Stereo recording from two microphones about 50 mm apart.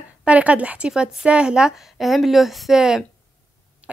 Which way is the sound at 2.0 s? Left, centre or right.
Centre.